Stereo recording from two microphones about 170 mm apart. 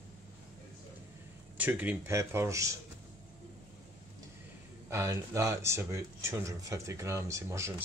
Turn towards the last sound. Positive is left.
turn(degrees=-15)  # may be behind; listen again after turning